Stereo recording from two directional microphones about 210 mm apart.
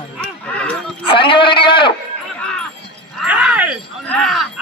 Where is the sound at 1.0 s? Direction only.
25° left (ahead or behind).